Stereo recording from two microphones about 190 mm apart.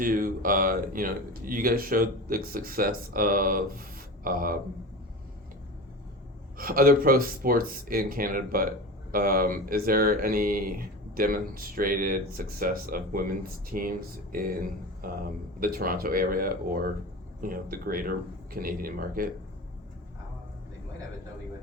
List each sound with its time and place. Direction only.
0.0 s speech: 50° right (ahead or behind)
6.6 s speech: 50° right (ahead or behind)